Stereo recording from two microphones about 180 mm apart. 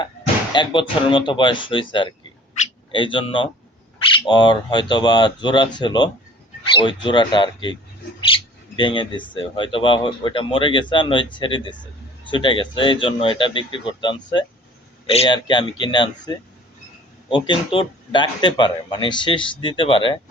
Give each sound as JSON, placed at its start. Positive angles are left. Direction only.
{"t": 0.5, "sound": "speech", "side_deg": 25}